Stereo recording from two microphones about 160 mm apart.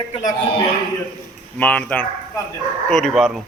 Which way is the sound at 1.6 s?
10° left (ahead or behind).